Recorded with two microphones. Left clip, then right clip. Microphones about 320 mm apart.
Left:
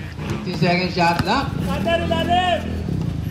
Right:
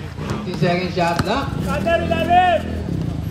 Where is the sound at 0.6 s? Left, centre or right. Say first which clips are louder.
Left 1 dB; centre.